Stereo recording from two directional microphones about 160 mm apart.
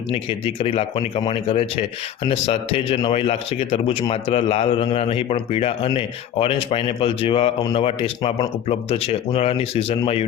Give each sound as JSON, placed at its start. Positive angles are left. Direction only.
{"t": 0.1, "sound": "a man's voice", "side_deg": 35}